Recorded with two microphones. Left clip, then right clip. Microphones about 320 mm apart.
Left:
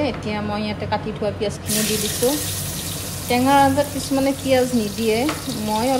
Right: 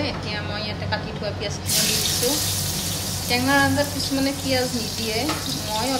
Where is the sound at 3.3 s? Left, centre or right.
Centre.